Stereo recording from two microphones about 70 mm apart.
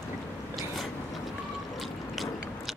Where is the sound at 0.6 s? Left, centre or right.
Centre.